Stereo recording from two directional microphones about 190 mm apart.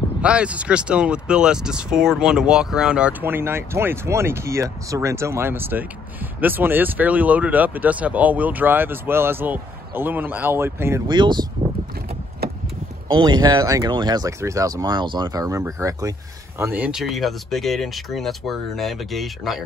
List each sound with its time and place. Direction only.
0.2 s speech: 5° right (ahead or behind)
11.1 s speech: 25° right (ahead or behind)
13.1 s speech: 20° right (ahead or behind); by 19.6 s centre (ahead or behind)